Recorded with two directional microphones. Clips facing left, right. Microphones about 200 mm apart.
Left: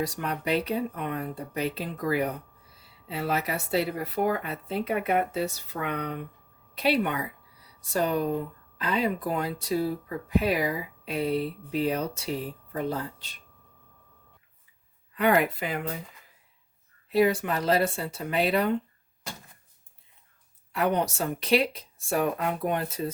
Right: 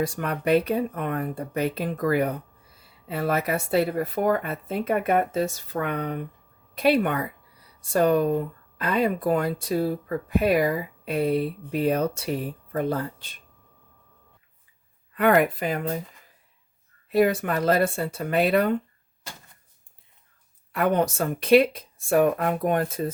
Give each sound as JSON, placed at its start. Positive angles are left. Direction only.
{"t": 0.0, "sound": "speech", "side_deg": -55}
{"t": 15.1, "sound": "speech", "side_deg": -50}
{"t": 17.1, "sound": "speech", "side_deg": -50}
{"t": 20.7, "sound": "speech", "side_deg": -50}